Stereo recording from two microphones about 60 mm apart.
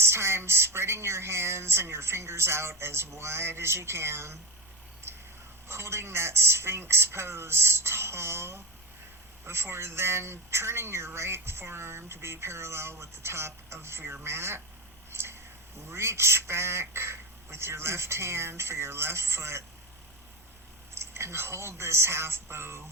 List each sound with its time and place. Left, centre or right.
0.0 s speech: right
5.1 s crow: right
5.6 s speech: right
15.1 s a sound: right
15.9 s speech: right
20.9 s speech: right